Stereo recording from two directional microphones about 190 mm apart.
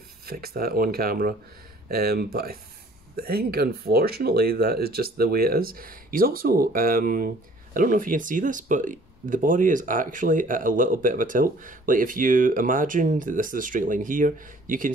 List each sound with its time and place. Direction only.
0.3 s speech: 50° right (ahead or behind)